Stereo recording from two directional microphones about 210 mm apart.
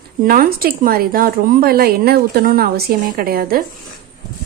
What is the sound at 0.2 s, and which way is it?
A woman's voice, 45° right (ahead or behind).